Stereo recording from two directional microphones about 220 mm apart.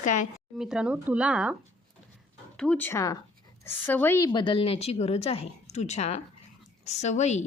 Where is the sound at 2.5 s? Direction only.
5° left (ahead or behind); by 7.4 s 30° left (ahead or behind).